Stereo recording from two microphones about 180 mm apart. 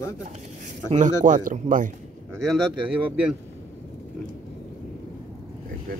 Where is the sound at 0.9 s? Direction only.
45° right (ahead or behind).